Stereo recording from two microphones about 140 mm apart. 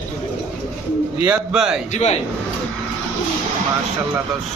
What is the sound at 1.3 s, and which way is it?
Speech, 5° right (ahead or behind).